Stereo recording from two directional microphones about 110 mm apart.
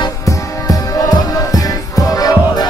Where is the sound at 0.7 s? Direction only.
35° left (ahead or behind).